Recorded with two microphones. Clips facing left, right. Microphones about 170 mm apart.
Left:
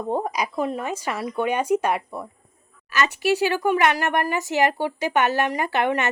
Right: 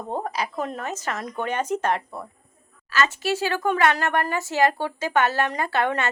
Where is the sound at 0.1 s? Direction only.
15° left (ahead or behind).